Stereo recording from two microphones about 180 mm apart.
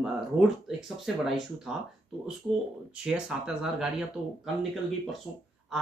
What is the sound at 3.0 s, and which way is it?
Speech, 5° right (ahead or behind).